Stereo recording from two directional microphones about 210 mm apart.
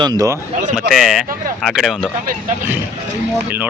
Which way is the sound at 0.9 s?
Centre (ahead or behind).